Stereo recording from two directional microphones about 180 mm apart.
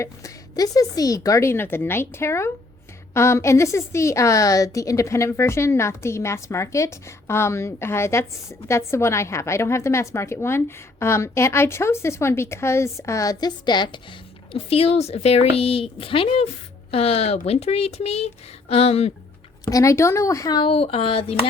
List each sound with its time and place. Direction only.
0.0 s a woman's voice: 20° left (ahead or behind); by 19.1 s 35° left (ahead or behind)
19.7 s speech: 15° left (ahead or behind); by 21.3 s 35° left (ahead or behind)